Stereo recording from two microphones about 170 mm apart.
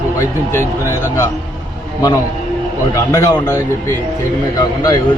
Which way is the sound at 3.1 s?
20° left (ahead or behind).